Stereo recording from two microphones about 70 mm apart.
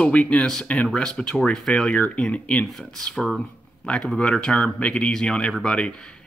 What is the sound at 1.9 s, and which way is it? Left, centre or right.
Speech, centre.